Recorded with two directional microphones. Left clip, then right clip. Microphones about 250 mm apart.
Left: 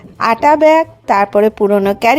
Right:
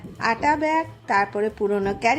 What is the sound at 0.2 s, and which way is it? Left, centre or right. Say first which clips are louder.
A woman's voice: left 11 dB; left.